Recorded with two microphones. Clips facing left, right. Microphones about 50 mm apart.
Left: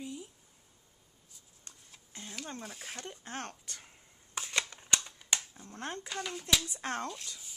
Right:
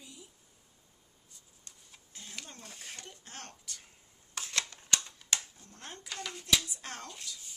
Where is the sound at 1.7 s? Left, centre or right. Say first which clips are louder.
Left 2 dB; left.